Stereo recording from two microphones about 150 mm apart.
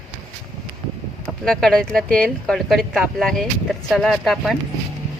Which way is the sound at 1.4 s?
5° left (ahead or behind).